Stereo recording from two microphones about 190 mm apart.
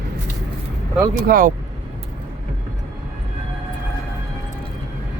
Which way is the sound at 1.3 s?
50° right (ahead or behind).